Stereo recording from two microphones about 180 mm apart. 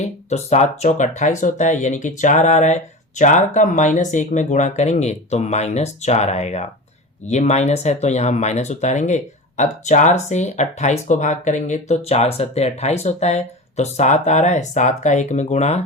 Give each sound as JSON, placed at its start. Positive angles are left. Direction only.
{"t": 0.0, "sound": "speech", "side_deg": 40}